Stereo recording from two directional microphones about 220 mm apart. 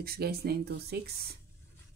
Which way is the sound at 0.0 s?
45° right (ahead or behind).